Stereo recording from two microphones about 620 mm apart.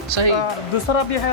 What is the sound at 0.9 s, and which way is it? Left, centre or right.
Speech, left.